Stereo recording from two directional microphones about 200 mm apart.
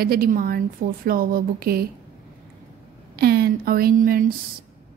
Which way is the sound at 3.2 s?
50° right (ahead or behind).